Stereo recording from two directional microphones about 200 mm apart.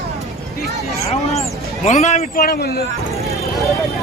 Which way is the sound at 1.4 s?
35° left (ahead or behind).